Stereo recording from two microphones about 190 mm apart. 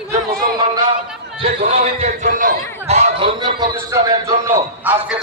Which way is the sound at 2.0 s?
45° right (ahead or behind).